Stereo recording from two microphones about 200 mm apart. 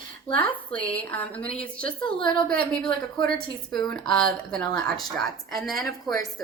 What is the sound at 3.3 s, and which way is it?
Speech, 5° left (ahead or behind).